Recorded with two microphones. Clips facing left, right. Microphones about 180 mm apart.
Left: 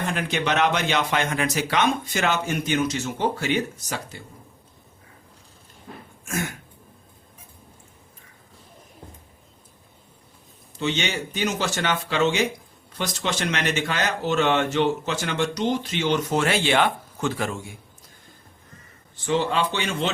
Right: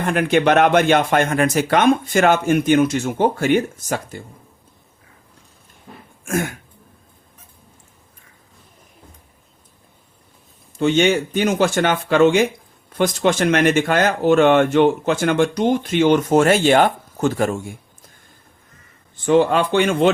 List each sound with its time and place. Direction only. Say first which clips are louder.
0.0 s speech: right 9 dB; 55° right (ahead or behind)
10.8 s speech: right 10 dB; 50° right (ahead or behind)
19.1 s speech: right 8 dB; 50° right (ahead or behind)